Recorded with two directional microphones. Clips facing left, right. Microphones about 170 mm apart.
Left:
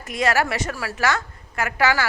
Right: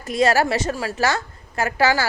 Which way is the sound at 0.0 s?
30° right (ahead or behind).